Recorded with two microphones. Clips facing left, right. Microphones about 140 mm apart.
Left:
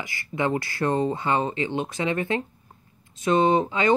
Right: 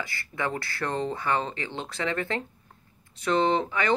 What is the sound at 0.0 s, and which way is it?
Speech, 20° left (ahead or behind).